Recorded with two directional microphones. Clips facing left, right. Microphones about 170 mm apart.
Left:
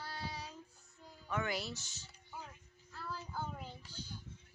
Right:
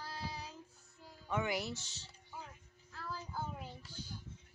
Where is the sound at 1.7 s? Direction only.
30° right (ahead or behind).